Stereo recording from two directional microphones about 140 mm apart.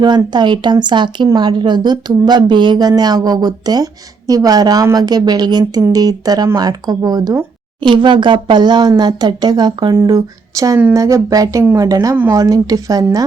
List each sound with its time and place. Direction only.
0.0 s a woman's voice: 30° right (ahead or behind)